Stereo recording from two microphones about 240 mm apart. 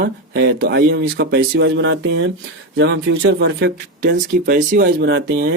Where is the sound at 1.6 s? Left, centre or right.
Right.